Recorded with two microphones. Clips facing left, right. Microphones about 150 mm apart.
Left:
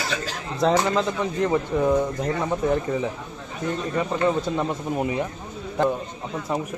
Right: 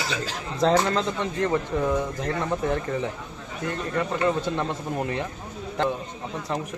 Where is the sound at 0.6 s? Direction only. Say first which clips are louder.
Left 1 dB; 5° left (ahead or behind).